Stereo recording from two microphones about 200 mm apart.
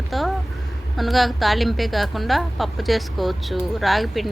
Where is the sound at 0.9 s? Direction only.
Centre (ahead or behind).